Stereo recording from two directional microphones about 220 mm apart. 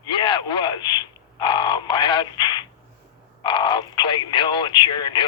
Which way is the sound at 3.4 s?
20° left (ahead or behind).